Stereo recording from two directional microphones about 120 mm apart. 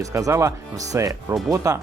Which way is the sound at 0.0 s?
25° right (ahead or behind).